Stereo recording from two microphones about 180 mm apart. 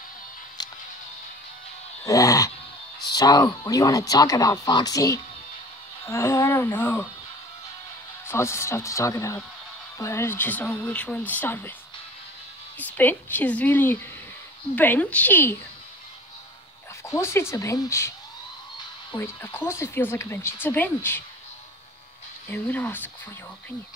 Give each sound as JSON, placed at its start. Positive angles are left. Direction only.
{"t": 0.6, "sound": "music", "side_deg": 20}
{"t": 2.0, "sound": "a sound", "side_deg": 20}
{"t": 3.1, "sound": "speech", "side_deg": 20}
{"t": 8.3, "sound": "speech", "side_deg": 15}
{"t": 12.7, "sound": "speech", "side_deg": 10}
{"t": 17.1, "sound": "speech", "side_deg": 15}
{"t": 19.1, "sound": "speech", "side_deg": 15}
{"t": 22.5, "sound": "speech", "side_deg": 10}